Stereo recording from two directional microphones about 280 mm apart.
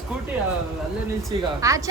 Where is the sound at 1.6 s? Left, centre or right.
Centre.